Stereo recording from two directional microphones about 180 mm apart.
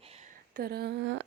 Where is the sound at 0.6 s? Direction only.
60° right (ahead or behind); by 1.3 s 80° right.